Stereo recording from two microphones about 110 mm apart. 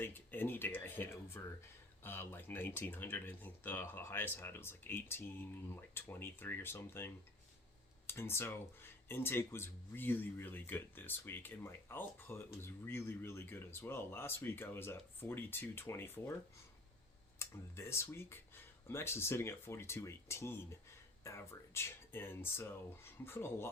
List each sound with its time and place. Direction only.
0.0 s speech: 20° left (ahead or behind)
17.4 s speech: 25° left (ahead or behind)